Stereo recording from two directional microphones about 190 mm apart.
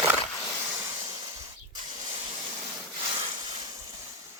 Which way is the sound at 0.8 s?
20° right (ahead or behind).